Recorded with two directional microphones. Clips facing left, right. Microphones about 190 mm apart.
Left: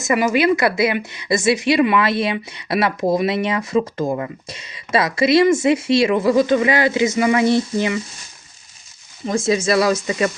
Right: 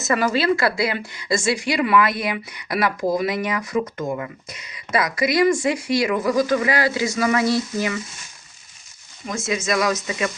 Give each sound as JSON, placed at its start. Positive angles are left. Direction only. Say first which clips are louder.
{"t": 0.0, "sound": "a woman's voice", "louder": "left 3 dB", "side_deg": 15}
{"t": 9.2, "sound": "speech", "louder": "left 7 dB", "side_deg": 30}